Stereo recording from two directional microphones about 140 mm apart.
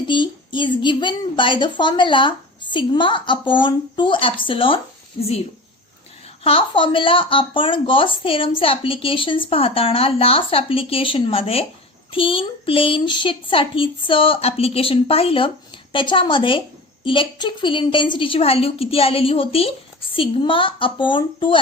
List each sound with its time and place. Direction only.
0.1 s a woman's voice: 35° left (ahead or behind)
6.4 s a woman's voice: 40° left (ahead or behind)